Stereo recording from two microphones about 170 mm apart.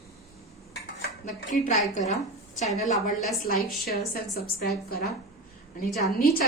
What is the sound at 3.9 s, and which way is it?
A woman's voice, 65° left (ahead or behind).